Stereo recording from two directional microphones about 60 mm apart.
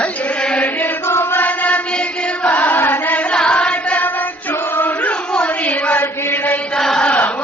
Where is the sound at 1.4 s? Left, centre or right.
Left.